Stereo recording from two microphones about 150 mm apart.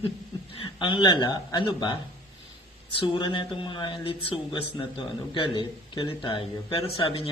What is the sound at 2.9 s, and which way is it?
Speech, 35° left (ahead or behind).